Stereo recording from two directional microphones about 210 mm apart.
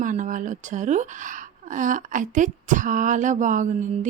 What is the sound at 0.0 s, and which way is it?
A woman's voice, 35° right (ahead or behind).